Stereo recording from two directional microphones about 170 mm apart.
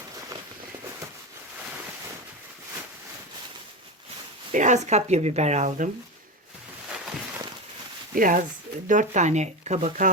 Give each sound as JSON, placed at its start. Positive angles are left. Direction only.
{"t": 4.5, "sound": "speech", "side_deg": -45}
{"t": 8.1, "sound": "speech", "side_deg": -55}